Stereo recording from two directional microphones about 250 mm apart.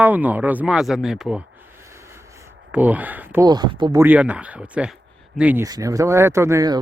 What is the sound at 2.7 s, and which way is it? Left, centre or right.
Speech, centre.